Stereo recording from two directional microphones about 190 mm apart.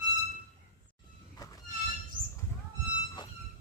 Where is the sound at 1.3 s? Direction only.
20° left (ahead or behind).